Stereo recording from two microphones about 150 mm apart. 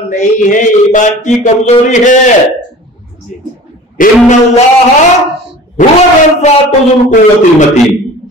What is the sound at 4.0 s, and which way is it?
Speech, 65° left (ahead or behind).